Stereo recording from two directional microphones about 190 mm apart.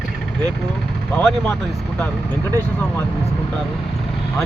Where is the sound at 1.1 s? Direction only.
Centre (ahead or behind).